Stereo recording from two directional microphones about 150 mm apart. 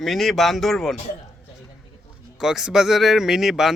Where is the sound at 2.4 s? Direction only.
5° right (ahead or behind).